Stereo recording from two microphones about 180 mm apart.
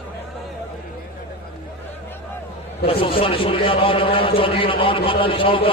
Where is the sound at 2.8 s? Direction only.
30° left (ahead or behind).